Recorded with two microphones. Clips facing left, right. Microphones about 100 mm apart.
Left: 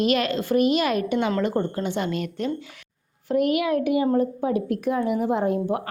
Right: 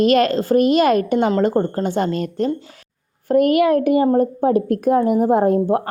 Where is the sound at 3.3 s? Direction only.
50° right (ahead or behind).